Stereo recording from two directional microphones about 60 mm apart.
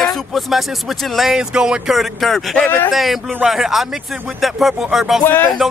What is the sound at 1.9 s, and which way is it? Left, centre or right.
Speech, centre.